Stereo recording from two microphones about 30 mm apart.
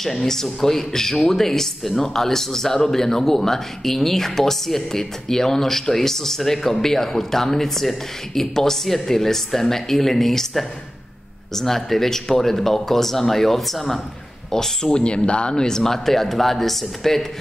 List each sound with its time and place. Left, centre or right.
0.0 s a man's voice: centre
11.5 s a man's voice: centre
14.5 s speech: centre; by 15.5 s left
15.5 s a man's voice: centre